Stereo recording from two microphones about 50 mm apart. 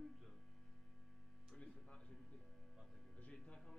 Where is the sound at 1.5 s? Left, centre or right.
Centre.